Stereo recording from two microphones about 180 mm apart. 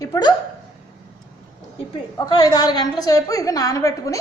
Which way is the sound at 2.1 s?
20° left (ahead or behind).